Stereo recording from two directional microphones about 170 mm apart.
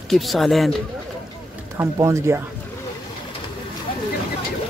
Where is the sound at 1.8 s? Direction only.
15° right (ahead or behind).